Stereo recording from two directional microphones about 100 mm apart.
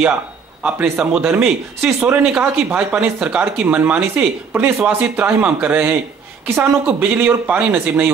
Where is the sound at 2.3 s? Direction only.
10° right (ahead or behind).